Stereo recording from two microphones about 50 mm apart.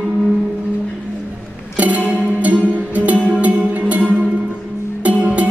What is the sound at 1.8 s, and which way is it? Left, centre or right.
Music, right.